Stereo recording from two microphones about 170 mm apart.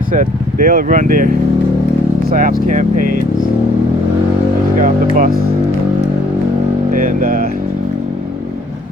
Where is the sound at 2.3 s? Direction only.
55° right (ahead or behind).